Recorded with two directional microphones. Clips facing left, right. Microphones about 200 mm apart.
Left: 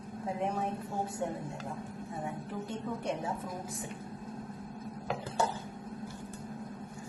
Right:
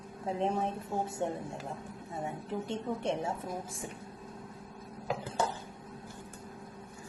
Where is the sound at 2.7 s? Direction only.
25° right (ahead or behind).